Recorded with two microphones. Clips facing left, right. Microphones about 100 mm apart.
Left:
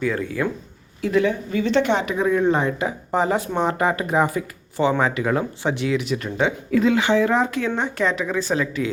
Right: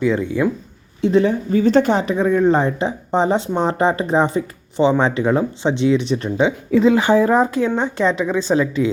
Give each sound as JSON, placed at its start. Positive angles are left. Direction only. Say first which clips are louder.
{"t": 0.0, "sound": "speech", "louder": "right 5 dB", "side_deg": -20}
{"t": 1.0, "sound": "speech", "louder": "right 4 dB", "side_deg": -30}
{"t": 6.3, "sound": "speech", "louder": "right 4 dB", "side_deg": -15}
{"t": 6.7, "sound": "a woman's voice", "louder": "right 4 dB", "side_deg": -30}